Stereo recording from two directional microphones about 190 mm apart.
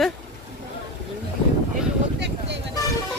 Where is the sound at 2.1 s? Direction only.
65° right (ahead or behind).